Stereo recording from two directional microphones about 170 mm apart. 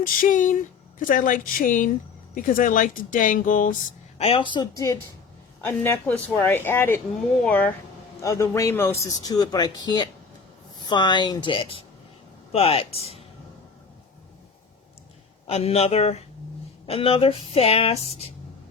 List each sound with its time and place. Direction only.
0.0 s speech: 50° left (ahead or behind)
4.2 s speech: 30° left (ahead or behind)
15.4 s a woman's voice: 35° left (ahead or behind)